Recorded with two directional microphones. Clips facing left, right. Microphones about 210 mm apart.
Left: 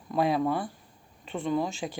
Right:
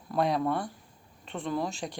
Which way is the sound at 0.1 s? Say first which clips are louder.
Left 2 dB; 5° left (ahead or behind).